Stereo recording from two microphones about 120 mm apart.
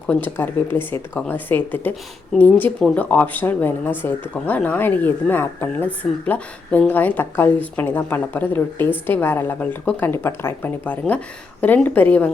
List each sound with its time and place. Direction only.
0.1 s speech: 15° left (ahead or behind)